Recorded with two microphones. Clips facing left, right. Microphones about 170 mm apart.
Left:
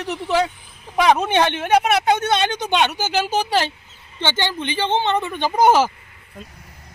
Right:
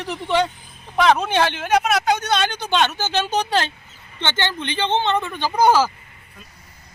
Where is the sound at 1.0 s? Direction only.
15° left (ahead or behind).